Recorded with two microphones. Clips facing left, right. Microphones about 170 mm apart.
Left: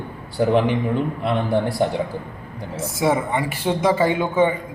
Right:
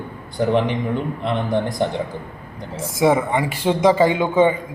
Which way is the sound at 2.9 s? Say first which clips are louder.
Right 3 dB; 15° right (ahead or behind).